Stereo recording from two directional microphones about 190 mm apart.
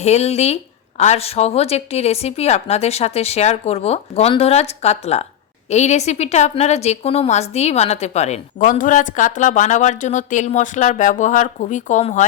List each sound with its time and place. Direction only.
0.0 s a woman's voice: 35° left (ahead or behind)